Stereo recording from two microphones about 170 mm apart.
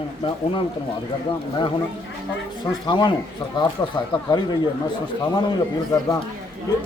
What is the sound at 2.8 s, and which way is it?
Speech, 25° left (ahead or behind).